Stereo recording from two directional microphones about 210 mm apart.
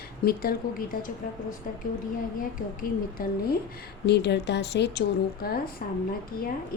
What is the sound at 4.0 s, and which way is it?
Speech, 55° left (ahead or behind).